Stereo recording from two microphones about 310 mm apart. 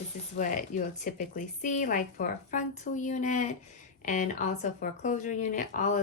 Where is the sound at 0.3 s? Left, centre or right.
Left.